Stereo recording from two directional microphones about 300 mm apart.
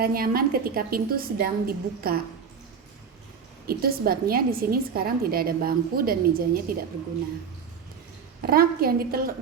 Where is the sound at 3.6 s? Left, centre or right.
Right.